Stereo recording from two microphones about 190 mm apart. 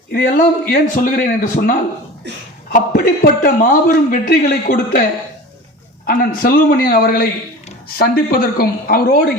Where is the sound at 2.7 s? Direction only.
50° left (ahead or behind).